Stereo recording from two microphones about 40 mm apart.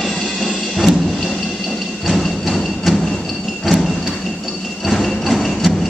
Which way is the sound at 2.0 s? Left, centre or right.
Centre.